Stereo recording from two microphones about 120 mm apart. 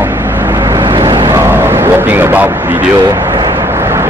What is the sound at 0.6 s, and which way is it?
Vehicle, 40° right (ahead or behind).